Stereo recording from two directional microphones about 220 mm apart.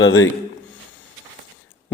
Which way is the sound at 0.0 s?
60° left (ahead or behind).